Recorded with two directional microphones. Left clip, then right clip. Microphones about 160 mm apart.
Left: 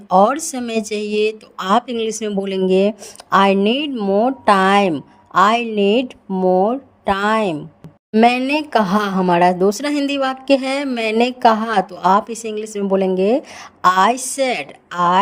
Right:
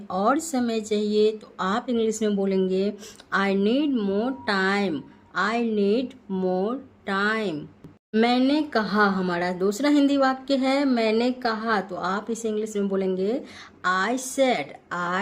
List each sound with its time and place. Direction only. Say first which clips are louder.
0.1 s a woman's voice: left 9 dB; 45° left (ahead or behind); by 4.4 s 30° left (ahead or behind)
4.4 s a woman's voice: left 11 dB; 45° left (ahead or behind)
6.3 s a woman's voice: left 11 dB; 30° left (ahead or behind)